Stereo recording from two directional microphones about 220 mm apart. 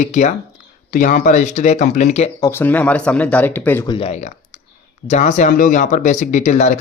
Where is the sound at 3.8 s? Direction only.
25° left (ahead or behind).